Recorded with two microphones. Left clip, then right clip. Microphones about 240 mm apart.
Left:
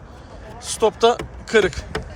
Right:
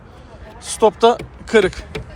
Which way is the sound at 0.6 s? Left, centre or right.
Centre.